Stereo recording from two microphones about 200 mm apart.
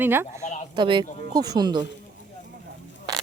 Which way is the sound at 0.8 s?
25° right (ahead or behind).